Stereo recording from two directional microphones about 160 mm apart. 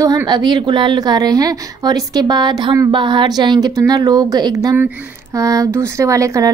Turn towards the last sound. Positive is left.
turn(degrees=-20)  # may be behind; listen again after turning